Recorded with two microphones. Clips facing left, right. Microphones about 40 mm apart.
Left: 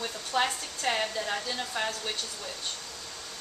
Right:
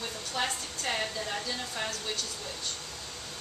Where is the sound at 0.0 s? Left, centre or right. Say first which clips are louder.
Left 4 dB; centre.